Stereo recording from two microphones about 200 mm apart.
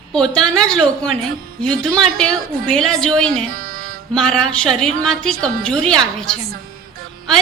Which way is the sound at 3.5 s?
45° right (ahead or behind).